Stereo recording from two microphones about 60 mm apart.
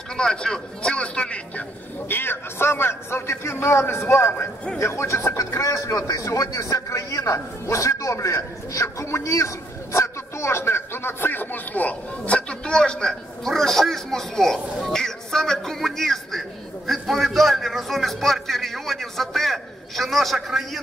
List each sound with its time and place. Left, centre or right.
0.2 s speech: centre
2.0 s a man's voice: left
9.9 s a sound: left; by 20.8 s centre